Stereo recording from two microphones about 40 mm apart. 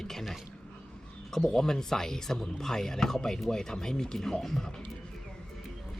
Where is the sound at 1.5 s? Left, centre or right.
Centre.